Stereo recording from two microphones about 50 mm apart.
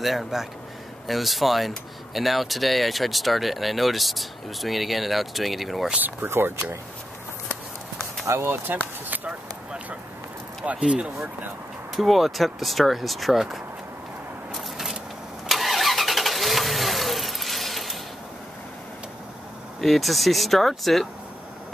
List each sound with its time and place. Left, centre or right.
0.0 s speech: centre
6.2 s speech: right
8.3 s speech: right
10.6 s speech: right
11.9 s speech: centre
15.4 s vehicle: centre
19.8 s speech: centre